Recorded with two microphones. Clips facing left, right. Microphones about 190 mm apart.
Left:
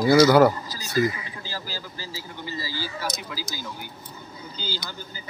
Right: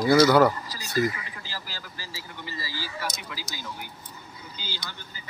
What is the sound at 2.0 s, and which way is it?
Speech, 30° left (ahead or behind).